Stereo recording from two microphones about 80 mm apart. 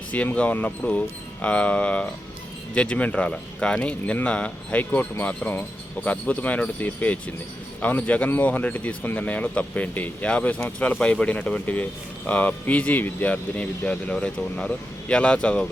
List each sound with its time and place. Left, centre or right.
0.1 s speech: centre